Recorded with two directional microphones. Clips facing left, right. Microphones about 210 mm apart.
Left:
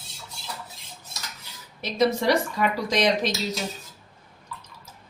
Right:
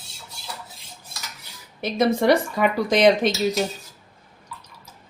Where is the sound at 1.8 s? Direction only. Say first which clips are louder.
Right 3 dB; 55° right (ahead or behind).